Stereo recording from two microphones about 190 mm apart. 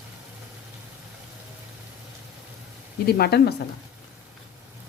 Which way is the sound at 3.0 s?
55° left (ahead or behind).